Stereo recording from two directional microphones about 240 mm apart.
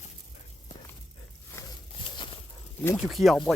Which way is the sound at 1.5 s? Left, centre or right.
Centre.